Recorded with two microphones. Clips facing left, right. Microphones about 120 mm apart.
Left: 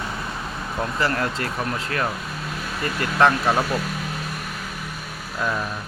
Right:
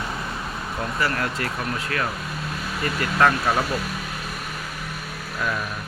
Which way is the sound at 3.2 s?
25° left (ahead or behind).